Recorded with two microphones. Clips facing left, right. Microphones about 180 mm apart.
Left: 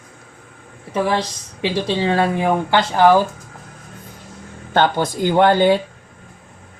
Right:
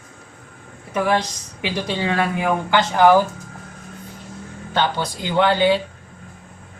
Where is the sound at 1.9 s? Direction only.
30° left (ahead or behind).